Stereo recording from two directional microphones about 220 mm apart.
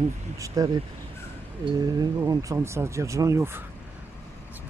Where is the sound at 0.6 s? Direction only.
15° right (ahead or behind).